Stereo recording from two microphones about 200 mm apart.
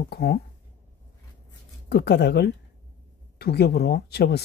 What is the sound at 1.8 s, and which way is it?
Speech, 55° left (ahead or behind).